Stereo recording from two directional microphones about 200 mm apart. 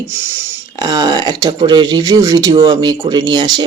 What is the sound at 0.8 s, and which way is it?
Speech, 20° right (ahead or behind).